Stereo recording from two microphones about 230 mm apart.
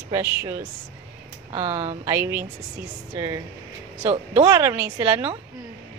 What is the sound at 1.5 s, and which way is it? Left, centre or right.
Speech, right.